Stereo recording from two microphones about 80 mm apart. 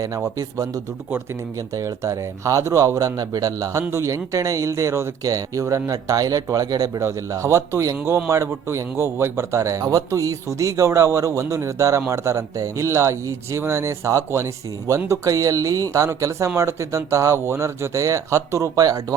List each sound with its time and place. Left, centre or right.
0.3 s speech: right
1.7 s a man's voice: right